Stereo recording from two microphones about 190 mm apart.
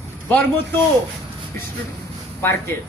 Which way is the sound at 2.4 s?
10° left (ahead or behind).